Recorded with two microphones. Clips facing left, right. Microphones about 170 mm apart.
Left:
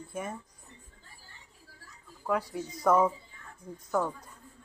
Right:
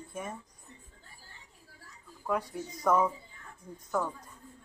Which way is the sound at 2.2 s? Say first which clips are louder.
Left 2 dB; 5° left (ahead or behind).